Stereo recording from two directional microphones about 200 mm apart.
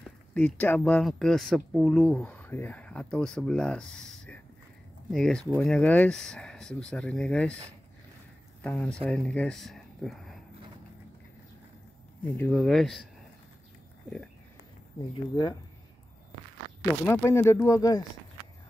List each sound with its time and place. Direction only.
0.3 s speech: 5° left (ahead or behind)
8.6 s speech: 5° left (ahead or behind)
12.4 s speech: 5° left (ahead or behind)
16.8 s speech: 15° left (ahead or behind)